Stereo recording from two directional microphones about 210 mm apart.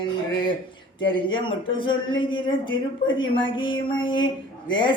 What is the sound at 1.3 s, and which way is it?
Speech, 25° left (ahead or behind).